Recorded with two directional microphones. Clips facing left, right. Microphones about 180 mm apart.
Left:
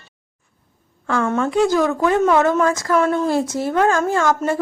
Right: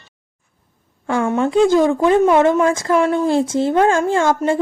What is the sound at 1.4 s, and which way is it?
A woman's voice, 25° right (ahead or behind).